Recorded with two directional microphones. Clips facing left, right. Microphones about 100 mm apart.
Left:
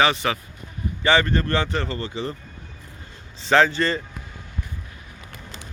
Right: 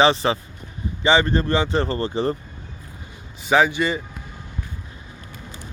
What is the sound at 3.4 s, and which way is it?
Speech, 10° right (ahead or behind).